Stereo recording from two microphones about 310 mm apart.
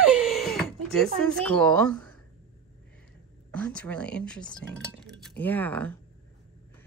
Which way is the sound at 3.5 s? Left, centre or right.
Centre.